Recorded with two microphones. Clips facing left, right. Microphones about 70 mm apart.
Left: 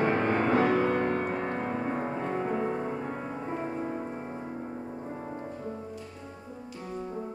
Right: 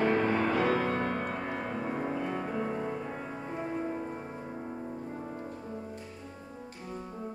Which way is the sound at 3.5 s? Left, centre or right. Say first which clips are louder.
Right 1 dB; left.